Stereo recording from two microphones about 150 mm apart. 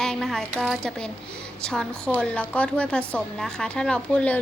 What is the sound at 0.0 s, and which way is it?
A woman's voice, 5° left (ahead or behind).